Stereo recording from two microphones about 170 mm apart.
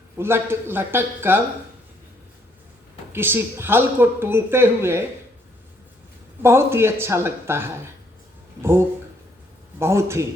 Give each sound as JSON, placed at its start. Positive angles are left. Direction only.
{"t": 0.2, "sound": "speech", "side_deg": -15}
{"t": 3.1, "sound": "speech", "side_deg": -10}
{"t": 6.4, "sound": "speech", "side_deg": -15}
{"t": 9.7, "sound": "speech", "side_deg": -15}